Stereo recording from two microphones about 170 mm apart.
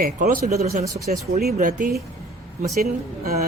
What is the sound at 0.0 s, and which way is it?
Speech, 55° right (ahead or behind).